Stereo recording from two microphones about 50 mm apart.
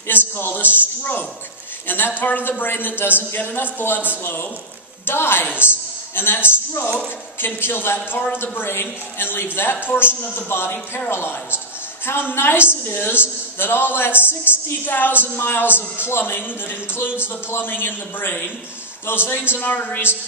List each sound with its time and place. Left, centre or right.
0.1 s a woman's voice: left
1.9 s a man's voice: left
17.5 s a woman's voice: left